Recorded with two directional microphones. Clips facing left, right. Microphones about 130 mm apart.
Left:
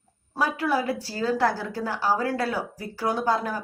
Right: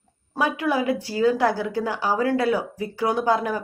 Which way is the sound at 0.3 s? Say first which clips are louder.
Right 2 dB; 15° right (ahead or behind).